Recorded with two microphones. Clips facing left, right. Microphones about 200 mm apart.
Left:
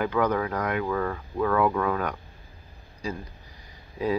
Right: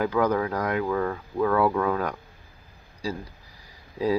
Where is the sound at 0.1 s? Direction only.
10° right (ahead or behind).